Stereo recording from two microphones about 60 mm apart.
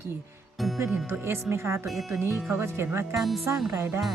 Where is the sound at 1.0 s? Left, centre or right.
Right.